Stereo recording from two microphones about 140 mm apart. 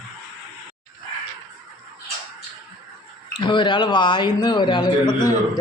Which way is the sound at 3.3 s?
35° left (ahead or behind).